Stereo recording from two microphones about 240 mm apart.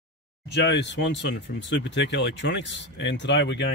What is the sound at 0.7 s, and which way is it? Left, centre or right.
Speech, left.